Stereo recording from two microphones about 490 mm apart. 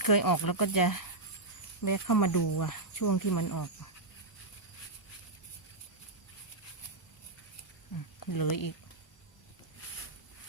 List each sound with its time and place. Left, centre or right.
0.0 s speech: left
8.2 s speech: left